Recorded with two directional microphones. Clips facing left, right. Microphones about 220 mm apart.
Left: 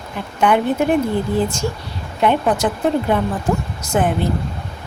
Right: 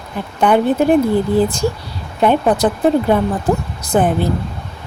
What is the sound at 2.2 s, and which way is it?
Speech, 35° right (ahead or behind).